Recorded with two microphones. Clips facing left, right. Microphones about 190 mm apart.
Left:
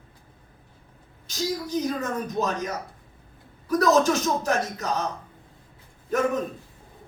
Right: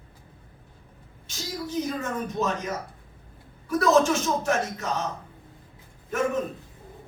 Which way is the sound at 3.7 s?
40° left (ahead or behind).